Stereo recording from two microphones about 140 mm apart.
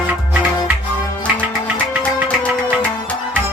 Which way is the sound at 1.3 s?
10° left (ahead or behind).